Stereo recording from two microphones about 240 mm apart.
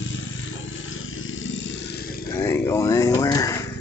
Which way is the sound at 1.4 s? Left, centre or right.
Left.